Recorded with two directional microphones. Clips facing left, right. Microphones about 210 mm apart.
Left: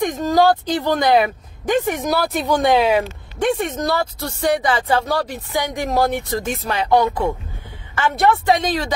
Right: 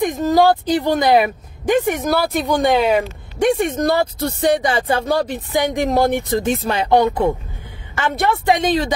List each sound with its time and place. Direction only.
0.2 s speech: 15° right (ahead or behind)
2.1 s speech: centre (ahead or behind)
3.5 s speech: 15° right (ahead or behind)
8.5 s speech: 20° right (ahead or behind)